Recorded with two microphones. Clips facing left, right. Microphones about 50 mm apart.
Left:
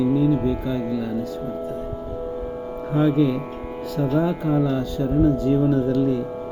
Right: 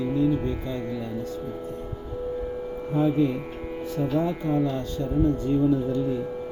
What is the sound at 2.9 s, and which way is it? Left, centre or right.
Speech, left.